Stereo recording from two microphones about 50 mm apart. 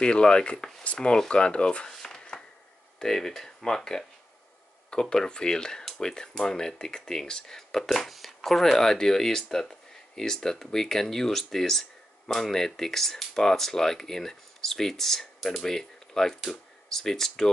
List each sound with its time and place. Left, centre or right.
0.0 s speech: centre
1.9 s a sound: centre
3.0 s speech: centre
5.0 s speech: centre